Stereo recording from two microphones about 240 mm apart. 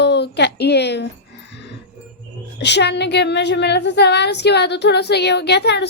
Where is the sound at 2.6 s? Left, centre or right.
Left.